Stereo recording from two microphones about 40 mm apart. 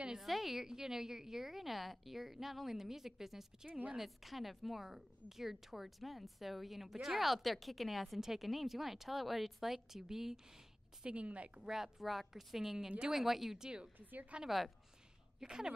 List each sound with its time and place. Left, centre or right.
0.2 s a woman's voice: centre
3.6 s a woman's voice: right
3.9 s a woman's voice: centre
11.1 s a woman's voice: right
11.6 s a woman's voice: centre
14.3 s speech: right